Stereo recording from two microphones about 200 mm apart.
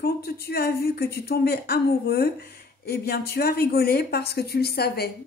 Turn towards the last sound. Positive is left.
turn(degrees=50)  # may be behind; listen again after turning